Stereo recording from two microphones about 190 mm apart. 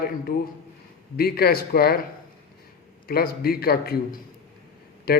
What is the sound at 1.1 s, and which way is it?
Speech, 55° left (ahead or behind).